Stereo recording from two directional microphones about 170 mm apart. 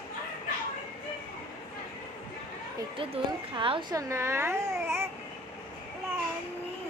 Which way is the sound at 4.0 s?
15° right (ahead or behind).